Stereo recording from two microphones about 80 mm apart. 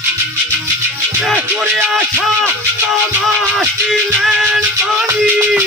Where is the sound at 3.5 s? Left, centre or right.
Centre.